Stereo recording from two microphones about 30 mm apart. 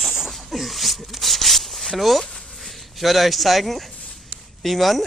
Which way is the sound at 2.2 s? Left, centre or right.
Centre.